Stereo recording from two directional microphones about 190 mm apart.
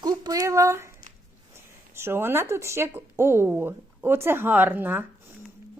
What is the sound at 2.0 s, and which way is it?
A woman's voice, 10° right (ahead or behind).